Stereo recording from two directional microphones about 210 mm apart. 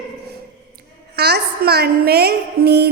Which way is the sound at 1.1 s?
50° right (ahead or behind).